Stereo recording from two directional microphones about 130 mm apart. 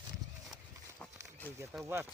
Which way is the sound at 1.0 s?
10° left (ahead or behind).